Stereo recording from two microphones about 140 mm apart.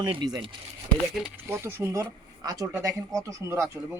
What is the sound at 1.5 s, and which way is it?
Speech, 15° right (ahead or behind).